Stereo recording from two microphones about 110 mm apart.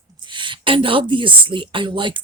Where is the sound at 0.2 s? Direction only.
45° right (ahead or behind).